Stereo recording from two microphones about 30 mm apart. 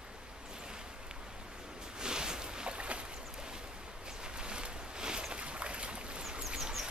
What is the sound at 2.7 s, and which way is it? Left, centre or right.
Boat, right.